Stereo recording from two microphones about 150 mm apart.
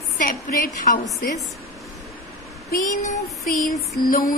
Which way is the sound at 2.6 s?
65° left (ahead or behind).